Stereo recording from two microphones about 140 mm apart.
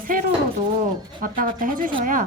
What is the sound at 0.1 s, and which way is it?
A woman's voice, 80° right.